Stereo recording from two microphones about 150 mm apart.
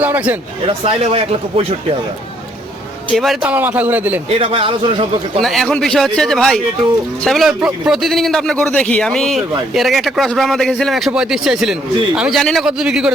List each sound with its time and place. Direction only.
0.0 s speech: 10° right (ahead or behind)
0.7 s a man's voice: 40° right (ahead or behind)
3.4 s speech: 10° right (ahead or behind)
4.3 s a man's voice: 40° right (ahead or behind)
5.4 s a man's voice: centre (ahead or behind)